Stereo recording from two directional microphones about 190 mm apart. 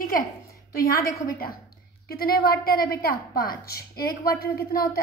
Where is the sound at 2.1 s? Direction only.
50° left (ahead or behind).